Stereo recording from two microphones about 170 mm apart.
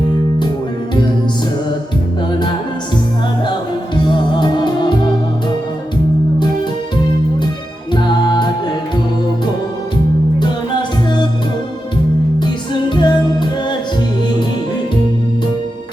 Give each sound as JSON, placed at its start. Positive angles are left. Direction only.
{"t": 3.9, "sound": "music", "side_deg": 30}
{"t": 7.9, "sound": "music", "side_deg": 25}
{"t": 12.9, "sound": "music", "side_deg": 25}